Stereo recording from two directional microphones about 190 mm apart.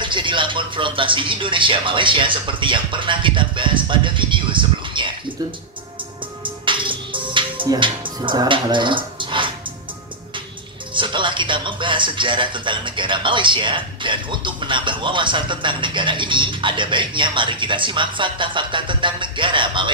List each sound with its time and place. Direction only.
0.0 s speech: 25° right (ahead or behind)
6.4 s music: 25° right (ahead or behind)
11.0 s speech: 25° right (ahead or behind)